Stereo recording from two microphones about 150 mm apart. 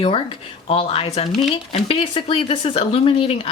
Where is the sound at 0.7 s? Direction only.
40° left (ahead or behind).